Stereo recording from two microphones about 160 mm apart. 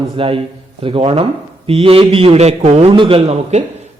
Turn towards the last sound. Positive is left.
turn(degrees=-40)  # may be behind; listen again after turning